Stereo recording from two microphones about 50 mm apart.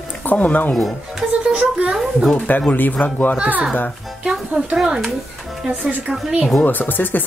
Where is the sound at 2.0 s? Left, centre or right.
Centre.